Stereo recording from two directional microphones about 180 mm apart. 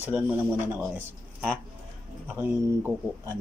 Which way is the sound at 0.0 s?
10° right (ahead or behind).